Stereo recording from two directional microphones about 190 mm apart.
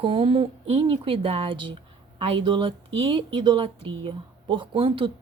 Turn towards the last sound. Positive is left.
turn(degrees=-25)  # may be behind; listen again after turning